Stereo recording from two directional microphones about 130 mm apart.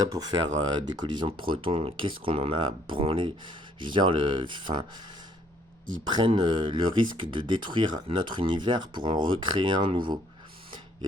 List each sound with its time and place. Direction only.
0.1 s speech: 30° right (ahead or behind)
6.1 s speech: 35° right (ahead or behind)